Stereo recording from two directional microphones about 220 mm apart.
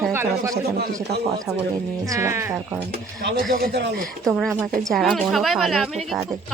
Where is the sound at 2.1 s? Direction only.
10° right (ahead or behind).